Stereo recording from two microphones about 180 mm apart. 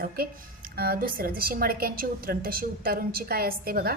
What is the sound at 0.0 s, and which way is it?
A woman's voice, 55° right (ahead or behind).